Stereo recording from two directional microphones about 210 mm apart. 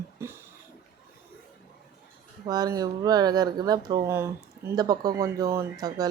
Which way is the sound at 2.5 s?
20° right (ahead or behind).